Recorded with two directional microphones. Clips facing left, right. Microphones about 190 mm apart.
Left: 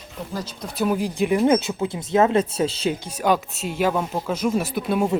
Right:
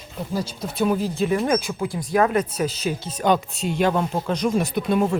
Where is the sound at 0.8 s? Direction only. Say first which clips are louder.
Even; 10° left (ahead or behind); by 2.9 s 25° left (ahead or behind).